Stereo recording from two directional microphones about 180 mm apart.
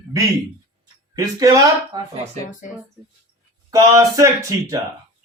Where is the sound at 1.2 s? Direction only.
20° right (ahead or behind).